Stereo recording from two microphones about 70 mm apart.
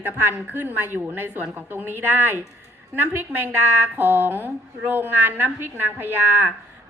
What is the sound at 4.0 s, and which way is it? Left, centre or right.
A woman's voice, right.